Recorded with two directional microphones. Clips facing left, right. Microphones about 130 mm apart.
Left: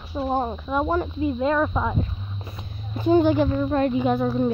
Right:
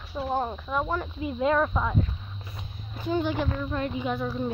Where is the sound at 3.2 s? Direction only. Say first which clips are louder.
Left 9 dB; 40° left (ahead or behind).